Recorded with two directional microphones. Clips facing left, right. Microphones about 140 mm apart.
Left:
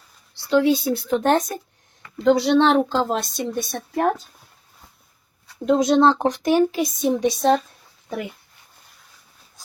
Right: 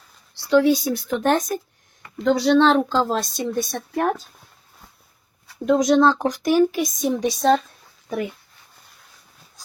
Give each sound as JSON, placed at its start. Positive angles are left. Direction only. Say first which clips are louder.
{"t": 0.5, "sound": "speech", "louder": "right 1 dB", "side_deg": 25}
{"t": 5.6, "sound": "speech", "louder": "even", "side_deg": 20}